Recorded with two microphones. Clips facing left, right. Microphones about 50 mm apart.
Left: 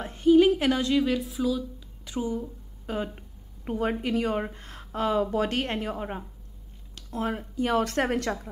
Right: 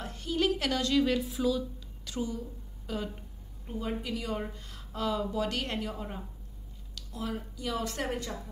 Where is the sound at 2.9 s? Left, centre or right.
Left.